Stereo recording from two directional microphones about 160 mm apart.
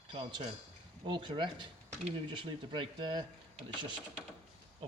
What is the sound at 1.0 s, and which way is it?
Speech, 30° right (ahead or behind).